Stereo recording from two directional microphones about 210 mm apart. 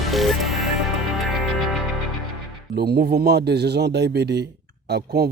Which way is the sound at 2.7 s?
50° right (ahead or behind).